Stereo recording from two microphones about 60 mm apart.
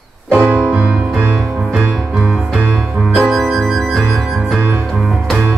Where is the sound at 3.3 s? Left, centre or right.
Centre.